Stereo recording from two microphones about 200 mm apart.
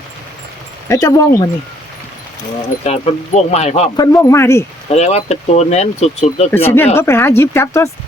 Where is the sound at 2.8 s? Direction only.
30° left (ahead or behind).